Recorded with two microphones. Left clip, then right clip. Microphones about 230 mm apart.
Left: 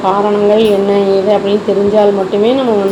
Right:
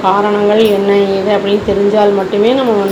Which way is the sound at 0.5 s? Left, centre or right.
Right.